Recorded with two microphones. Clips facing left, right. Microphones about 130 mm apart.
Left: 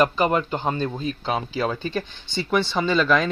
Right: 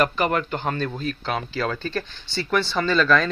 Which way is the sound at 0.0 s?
20° left (ahead or behind).